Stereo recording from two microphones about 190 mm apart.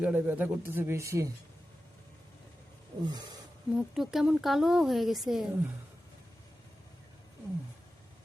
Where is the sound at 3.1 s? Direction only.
20° right (ahead or behind).